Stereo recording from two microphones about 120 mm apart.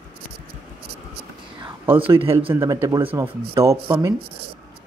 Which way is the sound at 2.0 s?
50° right (ahead or behind).